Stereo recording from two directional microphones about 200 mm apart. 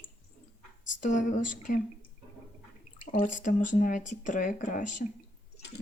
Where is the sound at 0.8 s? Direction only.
40° left (ahead or behind).